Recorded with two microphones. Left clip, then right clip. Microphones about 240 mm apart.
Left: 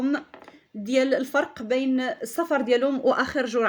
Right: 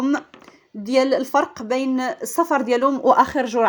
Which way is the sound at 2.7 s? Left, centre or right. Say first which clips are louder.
Right 10 dB; centre.